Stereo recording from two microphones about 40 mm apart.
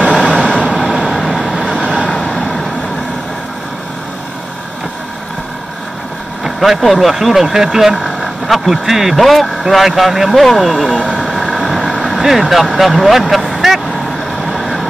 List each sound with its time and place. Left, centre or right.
0.1 s vehicle: left
0.7 s vehicle: centre
1.0 s vehicle: centre
2.0 s vehicle: centre
6.4 s speech: centre
9.2 s speech: centre
11.1 s vehicle: centre
12.2 s speech: centre
13.5 s vehicle: centre